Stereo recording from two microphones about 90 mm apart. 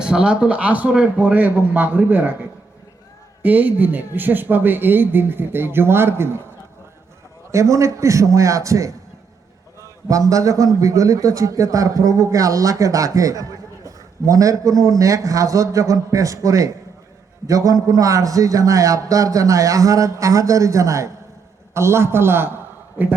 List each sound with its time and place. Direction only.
0.0 s a man's voice: 10° right (ahead or behind)
3.4 s speech: 20° right (ahead or behind)
7.5 s a man's voice: 35° right (ahead or behind)
10.1 s a man's voice: 40° right (ahead or behind); by 23.1 s 25° right (ahead or behind)